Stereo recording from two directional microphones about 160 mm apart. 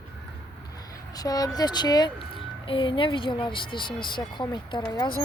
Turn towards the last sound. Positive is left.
turn(degrees=30)  # may be behind; listen again after turning